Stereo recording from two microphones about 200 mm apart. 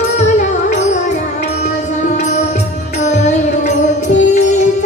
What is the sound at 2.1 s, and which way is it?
Music, 35° left (ahead or behind).